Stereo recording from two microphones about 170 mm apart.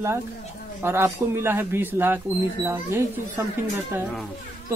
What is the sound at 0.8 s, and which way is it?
Speech, 15° right (ahead or behind).